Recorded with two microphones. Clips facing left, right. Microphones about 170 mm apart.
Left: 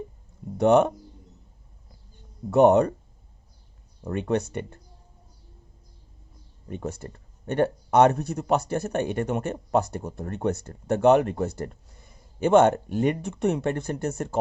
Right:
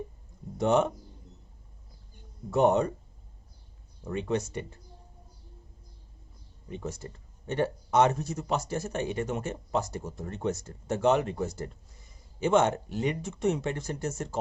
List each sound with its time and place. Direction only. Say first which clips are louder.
0.5 s speech: left 6 dB; 65° left (ahead or behind)
2.5 s speech: left 6 dB; 65° left (ahead or behind)
4.0 s speech: left 4 dB; 60° left (ahead or behind)
6.7 s speech: left 4 dB; 55° left (ahead or behind)